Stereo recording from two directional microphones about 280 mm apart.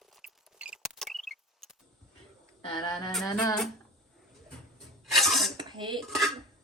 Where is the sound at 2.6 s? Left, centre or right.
Centre.